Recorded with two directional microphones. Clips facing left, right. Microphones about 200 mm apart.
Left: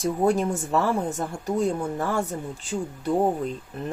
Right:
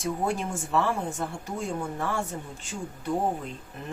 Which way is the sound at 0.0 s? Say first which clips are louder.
Left 6 dB; 40° left (ahead or behind).